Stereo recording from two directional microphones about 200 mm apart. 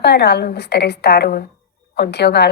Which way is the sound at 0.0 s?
55° left (ahead or behind).